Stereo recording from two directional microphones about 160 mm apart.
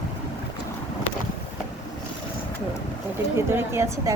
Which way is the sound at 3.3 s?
15° right (ahead or behind).